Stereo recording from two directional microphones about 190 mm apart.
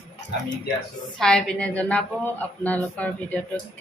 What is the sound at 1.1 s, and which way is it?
A woman's voice, 5° left (ahead or behind).